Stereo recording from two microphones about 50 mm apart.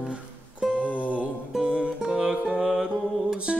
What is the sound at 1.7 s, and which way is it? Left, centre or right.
Music, centre.